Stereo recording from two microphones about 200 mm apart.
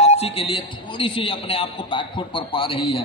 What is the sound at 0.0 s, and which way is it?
A man's voice, 30° left (ahead or behind).